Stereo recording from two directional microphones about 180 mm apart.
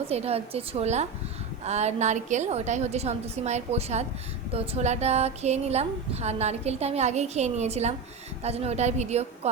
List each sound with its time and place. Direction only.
0.1 s speech: 35° right (ahead or behind)